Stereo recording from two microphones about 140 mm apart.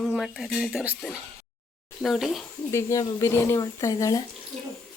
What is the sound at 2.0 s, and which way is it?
Speech, centre (ahead or behind).